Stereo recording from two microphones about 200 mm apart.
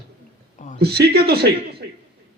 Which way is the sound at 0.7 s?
55° right (ahead or behind).